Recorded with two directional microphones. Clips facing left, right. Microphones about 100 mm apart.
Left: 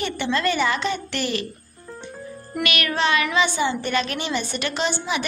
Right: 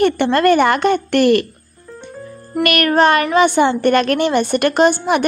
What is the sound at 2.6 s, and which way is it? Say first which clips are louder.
A woman's voice: right 10 dB; 50° right (ahead or behind).